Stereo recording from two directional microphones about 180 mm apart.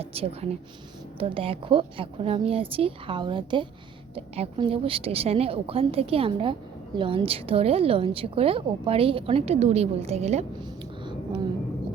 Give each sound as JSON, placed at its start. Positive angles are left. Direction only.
{"t": 0.0, "sound": "a woman's voice", "side_deg": -35}